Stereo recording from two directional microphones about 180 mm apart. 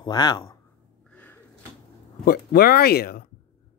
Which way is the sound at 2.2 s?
60° left (ahead or behind).